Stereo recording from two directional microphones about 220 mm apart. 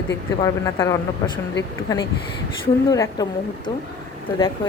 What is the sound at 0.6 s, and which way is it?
Speech, 15° left (ahead or behind).